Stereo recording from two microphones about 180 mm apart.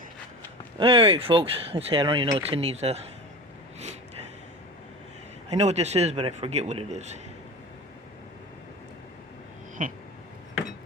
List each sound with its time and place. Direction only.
0.8 s a man's voice: 30° right (ahead or behind)
5.5 s a man's voice: 40° right (ahead or behind)
9.8 s a sound: 50° right (ahead or behind)